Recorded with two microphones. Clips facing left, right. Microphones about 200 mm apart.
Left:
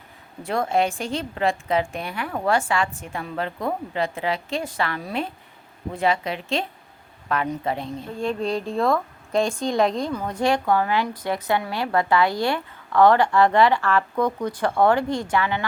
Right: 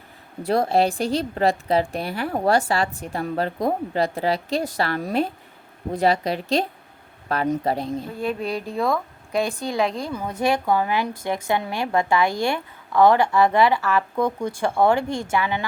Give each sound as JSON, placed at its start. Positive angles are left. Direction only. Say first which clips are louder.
{"t": 0.4, "sound": "a woman's voice", "louder": "right 3 dB", "side_deg": -35}
{"t": 8.2, "sound": "speech", "louder": "left 4 dB", "side_deg": -5}